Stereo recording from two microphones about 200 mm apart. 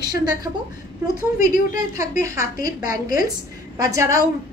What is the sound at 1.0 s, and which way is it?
A woman's voice, 15° right (ahead or behind).